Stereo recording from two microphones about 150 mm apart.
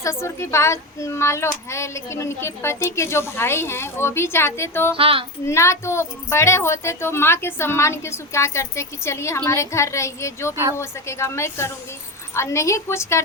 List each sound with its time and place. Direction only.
0.0 s speech: 20° left (ahead or behind)
4.9 s female singing: 35° right (ahead or behind)
5.5 s a woman's voice: 20° left (ahead or behind)